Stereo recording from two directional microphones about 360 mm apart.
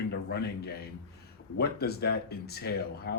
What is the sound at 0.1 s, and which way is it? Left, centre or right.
Speech, left.